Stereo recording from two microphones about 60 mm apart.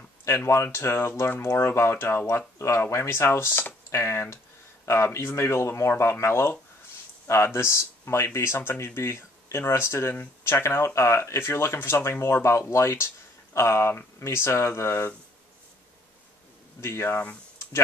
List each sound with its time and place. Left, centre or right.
0.5 s speech: left
16.8 s speech: left